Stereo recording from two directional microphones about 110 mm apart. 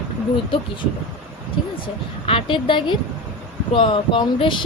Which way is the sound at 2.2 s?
55° left (ahead or behind).